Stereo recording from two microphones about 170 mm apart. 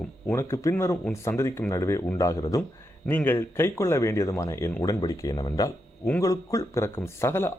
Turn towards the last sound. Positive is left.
turn(degrees=15)  # may be behind; listen again after turning